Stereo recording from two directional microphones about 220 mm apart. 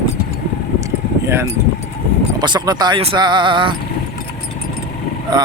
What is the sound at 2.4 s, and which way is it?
Speech, 20° right (ahead or behind).